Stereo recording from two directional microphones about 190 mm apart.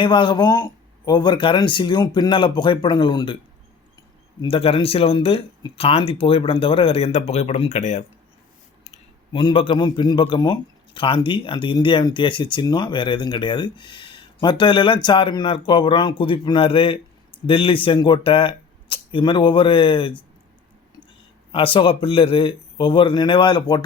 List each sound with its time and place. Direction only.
0.0 s speech: 25° left (ahead or behind)
4.4 s speech: 30° left (ahead or behind)
9.3 s speech: 25° left (ahead or behind)
21.5 s speech: 25° left (ahead or behind)